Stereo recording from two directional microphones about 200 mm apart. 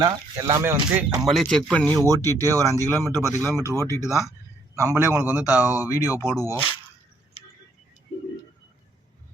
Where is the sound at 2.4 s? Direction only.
15° right (ahead or behind).